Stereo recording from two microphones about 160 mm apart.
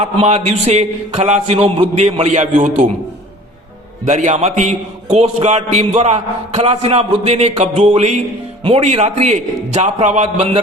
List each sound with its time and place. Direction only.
0.0 s a man's voice: 45° right (ahead or behind)
4.0 s a man's voice: 45° right (ahead or behind)